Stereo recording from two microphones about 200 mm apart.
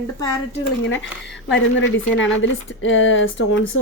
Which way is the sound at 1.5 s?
70° left (ahead or behind).